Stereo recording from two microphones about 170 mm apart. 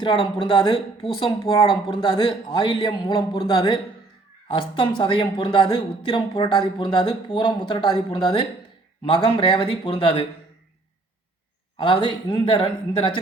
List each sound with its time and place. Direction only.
0.0 s speech: 30° left (ahead or behind)
11.8 s speech: 30° left (ahead or behind)